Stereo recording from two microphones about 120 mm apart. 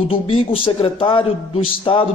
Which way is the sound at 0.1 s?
50° left (ahead or behind).